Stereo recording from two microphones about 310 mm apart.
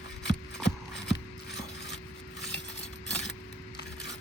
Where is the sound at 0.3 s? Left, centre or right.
Left.